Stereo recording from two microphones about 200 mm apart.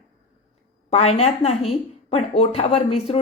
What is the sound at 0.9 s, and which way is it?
A woman's voice, 30° left (ahead or behind).